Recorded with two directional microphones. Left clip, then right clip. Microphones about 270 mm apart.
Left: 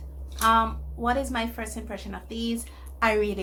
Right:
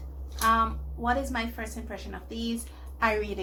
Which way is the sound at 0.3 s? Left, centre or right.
Centre.